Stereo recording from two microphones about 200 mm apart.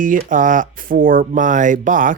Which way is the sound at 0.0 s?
40° right (ahead or behind).